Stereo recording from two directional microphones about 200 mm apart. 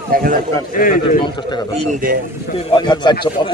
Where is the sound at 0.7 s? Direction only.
45° left (ahead or behind).